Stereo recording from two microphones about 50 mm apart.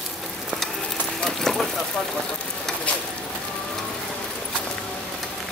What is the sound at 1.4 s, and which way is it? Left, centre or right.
Vehicle, centre.